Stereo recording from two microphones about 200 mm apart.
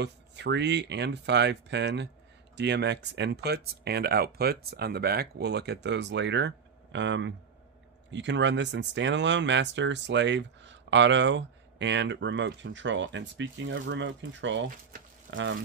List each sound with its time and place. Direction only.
0.0 s speech: 60° right (ahead or behind)